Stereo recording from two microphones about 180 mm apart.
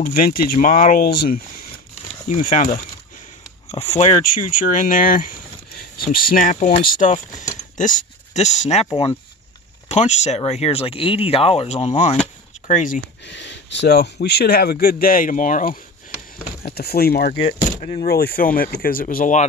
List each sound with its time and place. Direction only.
0.0 s speech: 55° left (ahead or behind)
2.2 s speech: 45° left (ahead or behind)
8.8 s speech: 30° left (ahead or behind); by 13.0 s 45° left (ahead or behind)
13.3 s speech: 75° left (ahead or behind); by 17.4 s 60° left (ahead or behind)
17.5 s speech: 40° left (ahead or behind)
18.0 s speech: 60° left (ahead or behind)